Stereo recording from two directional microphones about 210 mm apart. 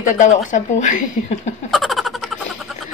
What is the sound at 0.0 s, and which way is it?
Speech, 35° left (ahead or behind).